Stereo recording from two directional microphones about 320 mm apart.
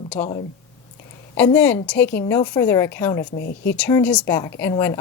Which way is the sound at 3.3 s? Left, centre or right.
Left.